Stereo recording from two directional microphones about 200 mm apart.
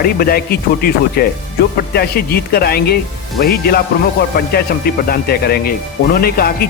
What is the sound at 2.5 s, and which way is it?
Speech, 50° left (ahead or behind).